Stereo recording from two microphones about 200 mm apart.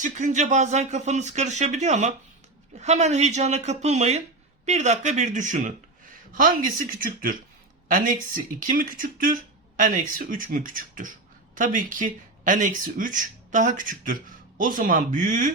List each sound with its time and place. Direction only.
0.0 s speech: 40° right (ahead or behind)